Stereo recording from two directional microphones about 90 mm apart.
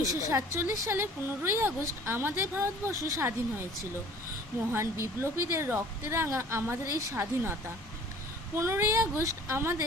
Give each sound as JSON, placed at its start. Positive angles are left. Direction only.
{"t": 0.0, "sound": "speech", "side_deg": -35}
{"t": 4.7, "sound": "speech", "side_deg": -30}
{"t": 8.5, "sound": "speech", "side_deg": -30}